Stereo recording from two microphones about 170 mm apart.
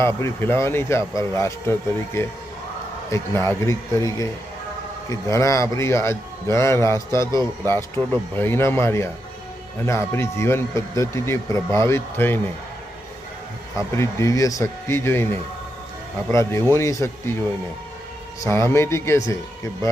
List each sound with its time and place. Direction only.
0.0 s speech: 15° left (ahead or behind)
13.7 s speech: 15° left (ahead or behind)
18.4 s speech: 15° left (ahead or behind)